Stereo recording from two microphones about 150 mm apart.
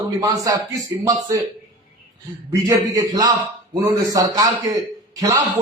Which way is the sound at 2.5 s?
25° right (ahead or behind).